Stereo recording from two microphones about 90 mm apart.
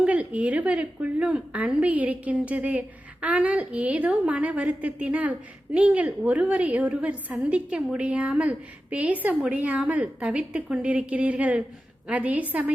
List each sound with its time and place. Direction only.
0.0 s a woman's voice: 15° right (ahead or behind)